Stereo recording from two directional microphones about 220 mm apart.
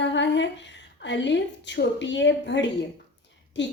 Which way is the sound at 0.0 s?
55° left (ahead or behind).